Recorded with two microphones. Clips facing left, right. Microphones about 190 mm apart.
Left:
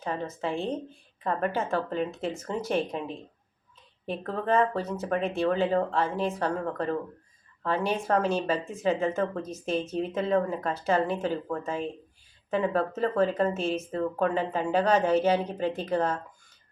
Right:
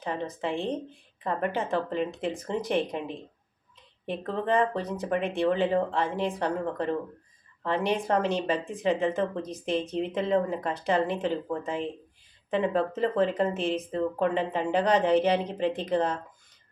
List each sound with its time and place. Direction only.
0.0 s speech: 15° right (ahead or behind)